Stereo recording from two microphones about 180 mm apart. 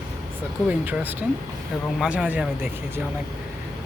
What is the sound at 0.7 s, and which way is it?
Speech, 10° right (ahead or behind).